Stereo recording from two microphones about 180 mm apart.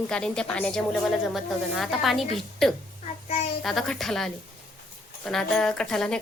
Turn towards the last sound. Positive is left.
turn(degrees=5)  # may be behind; listen again after turning